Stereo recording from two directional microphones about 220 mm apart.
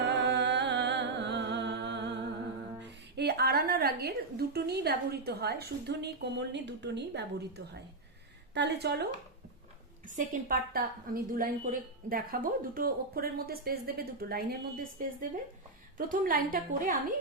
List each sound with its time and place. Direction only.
0.0 s music: 50° right (ahead or behind)
2.8 s a woman's voice: 50° right (ahead or behind)
10.1 s a woman's voice: 40° right (ahead or behind)